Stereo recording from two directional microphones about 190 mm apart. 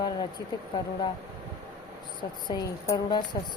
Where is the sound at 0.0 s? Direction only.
20° left (ahead or behind).